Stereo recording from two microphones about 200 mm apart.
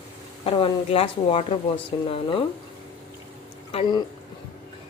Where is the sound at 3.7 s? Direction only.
25° left (ahead or behind).